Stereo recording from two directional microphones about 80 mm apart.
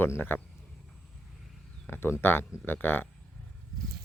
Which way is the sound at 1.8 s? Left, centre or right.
Left.